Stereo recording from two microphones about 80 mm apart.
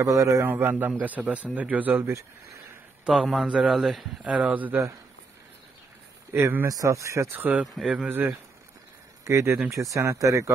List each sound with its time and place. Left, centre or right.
0.0 s speech: right
0.5 s a man's voice: right
3.1 s speech: centre
4.3 s speech: centre
6.3 s speech: right
6.7 s speech: right
7.2 s a man's voice: right
7.7 s speech: centre
8.1 s a man's voice: right
9.2 s speech: right